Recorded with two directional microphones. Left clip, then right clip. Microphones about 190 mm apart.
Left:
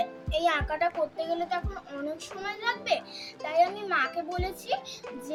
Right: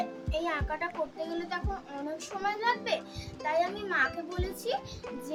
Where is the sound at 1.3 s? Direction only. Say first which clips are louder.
Left 5 dB; 25° right (ahead or behind).